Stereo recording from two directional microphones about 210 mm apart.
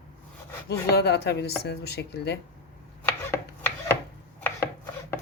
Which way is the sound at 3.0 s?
10° left (ahead or behind).